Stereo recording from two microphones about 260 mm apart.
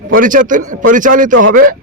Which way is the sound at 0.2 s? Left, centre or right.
Right.